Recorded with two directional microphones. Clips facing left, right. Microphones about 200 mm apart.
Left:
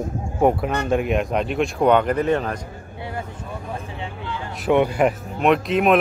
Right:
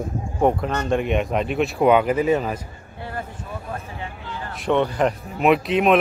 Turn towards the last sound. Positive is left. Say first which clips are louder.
# even
turn(degrees=0)  # may be behind; listen again after turning